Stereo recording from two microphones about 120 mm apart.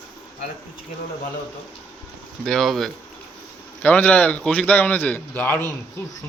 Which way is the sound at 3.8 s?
10° left (ahead or behind).